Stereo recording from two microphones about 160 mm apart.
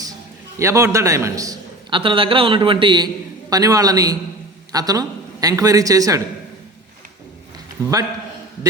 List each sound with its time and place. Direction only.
0.6 s a man's voice: 20° right (ahead or behind)